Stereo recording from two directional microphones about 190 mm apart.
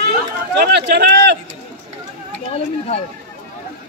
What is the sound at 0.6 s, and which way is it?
Speech, 60° right (ahead or behind).